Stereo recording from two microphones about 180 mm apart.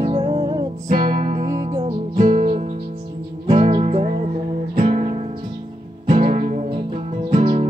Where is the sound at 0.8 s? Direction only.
50° right (ahead or behind).